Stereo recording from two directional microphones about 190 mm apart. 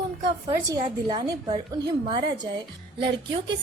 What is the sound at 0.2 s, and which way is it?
A woman's voice, 20° right (ahead or behind).